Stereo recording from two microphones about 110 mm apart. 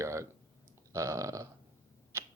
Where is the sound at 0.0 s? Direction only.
25° right (ahead or behind).